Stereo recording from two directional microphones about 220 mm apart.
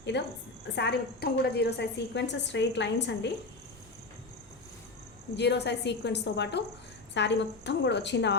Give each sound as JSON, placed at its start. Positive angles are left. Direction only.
{"t": 0.1, "sound": "a woman's voice", "side_deg": 50}
{"t": 5.4, "sound": "a woman's voice", "side_deg": 50}